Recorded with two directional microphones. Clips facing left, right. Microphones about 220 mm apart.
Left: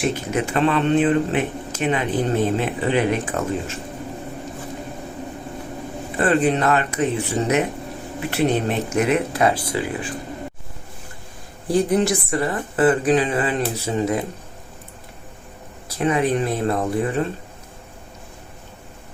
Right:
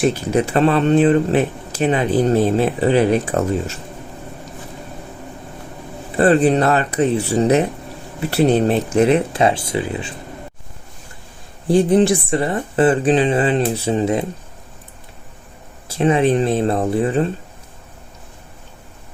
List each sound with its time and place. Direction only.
0.1 s speech: 35° right (ahead or behind)
6.1 s speech: 35° right (ahead or behind)
11.7 s speech: 25° right (ahead or behind)
15.9 s speech: 25° right (ahead or behind)